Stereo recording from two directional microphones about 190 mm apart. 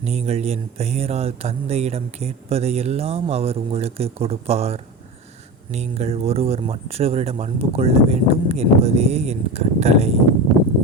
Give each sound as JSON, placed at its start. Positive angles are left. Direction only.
{"t": 0.0, "sound": "speech", "side_deg": -35}